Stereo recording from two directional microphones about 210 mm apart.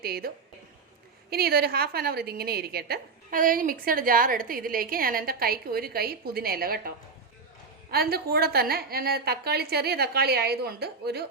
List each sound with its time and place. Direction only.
0.0 s a woman's voice: 45° right (ahead or behind)
1.3 s a woman's voice: 45° right (ahead or behind)